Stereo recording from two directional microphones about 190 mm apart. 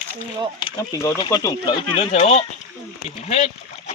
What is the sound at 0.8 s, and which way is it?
Speech, 15° left (ahead or behind).